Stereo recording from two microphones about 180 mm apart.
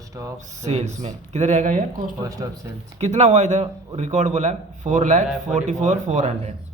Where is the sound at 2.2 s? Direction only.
20° right (ahead or behind).